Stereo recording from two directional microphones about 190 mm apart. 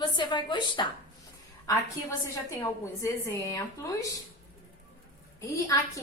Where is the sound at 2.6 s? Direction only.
15° left (ahead or behind).